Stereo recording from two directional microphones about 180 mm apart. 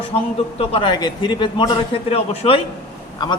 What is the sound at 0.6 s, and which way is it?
A man's voice, 30° left (ahead or behind).